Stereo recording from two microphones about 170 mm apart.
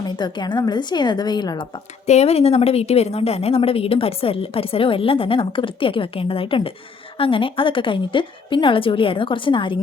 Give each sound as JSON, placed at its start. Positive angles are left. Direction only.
{"t": 0.2, "sound": "a woman's voice", "side_deg": 25}
{"t": 2.0, "sound": "a woman's voice", "side_deg": 40}